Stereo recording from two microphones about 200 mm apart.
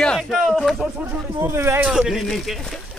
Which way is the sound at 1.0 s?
10° right (ahead or behind).